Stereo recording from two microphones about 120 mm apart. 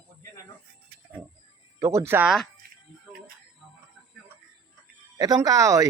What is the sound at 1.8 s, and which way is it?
Speech, 25° right (ahead or behind).